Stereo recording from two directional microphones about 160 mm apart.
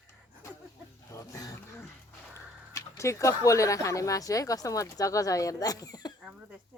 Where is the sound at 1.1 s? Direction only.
20° left (ahead or behind).